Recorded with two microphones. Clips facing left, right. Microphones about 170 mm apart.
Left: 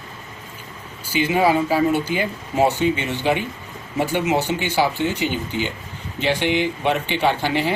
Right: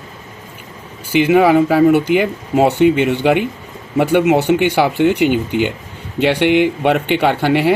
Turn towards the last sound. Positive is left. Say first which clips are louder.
# right 6 dB
turn(degrees=-60)  # may be behind; listen again after turning